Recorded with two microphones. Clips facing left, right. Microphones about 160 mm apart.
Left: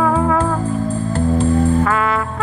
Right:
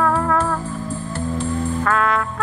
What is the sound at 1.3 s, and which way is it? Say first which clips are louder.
Music: left 8 dB; 60° left (ahead or behind).